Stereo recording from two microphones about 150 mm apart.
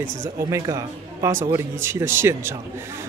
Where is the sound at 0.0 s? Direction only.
20° right (ahead or behind).